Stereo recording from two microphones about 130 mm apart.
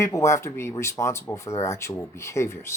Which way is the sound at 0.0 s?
25° left (ahead or behind).